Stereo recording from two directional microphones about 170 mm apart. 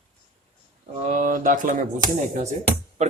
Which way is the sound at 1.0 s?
50° right (ahead or behind).